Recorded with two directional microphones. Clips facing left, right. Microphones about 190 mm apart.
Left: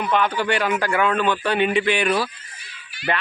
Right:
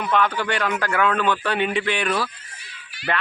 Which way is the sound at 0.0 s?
5° left (ahead or behind).